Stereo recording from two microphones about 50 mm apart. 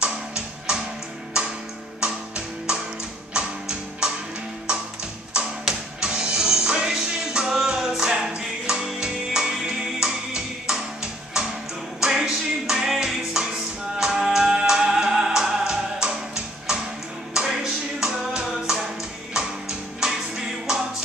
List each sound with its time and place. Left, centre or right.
0.0 s music: centre
2.0 s music: centre
18.0 s music: centre
20.0 s music: centre